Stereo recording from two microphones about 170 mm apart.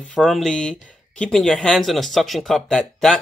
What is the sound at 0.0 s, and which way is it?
Speech, 5° left (ahead or behind).